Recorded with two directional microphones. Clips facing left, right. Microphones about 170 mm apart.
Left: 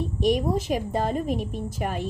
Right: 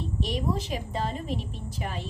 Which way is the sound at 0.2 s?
50° left (ahead or behind).